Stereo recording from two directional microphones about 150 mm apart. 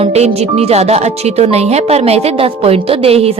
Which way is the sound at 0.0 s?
40° right (ahead or behind).